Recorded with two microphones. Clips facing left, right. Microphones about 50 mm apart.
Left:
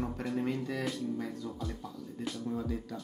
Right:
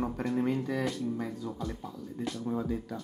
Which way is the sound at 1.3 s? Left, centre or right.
Centre.